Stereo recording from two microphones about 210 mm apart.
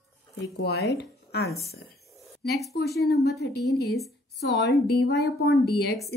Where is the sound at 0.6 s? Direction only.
50° left (ahead or behind).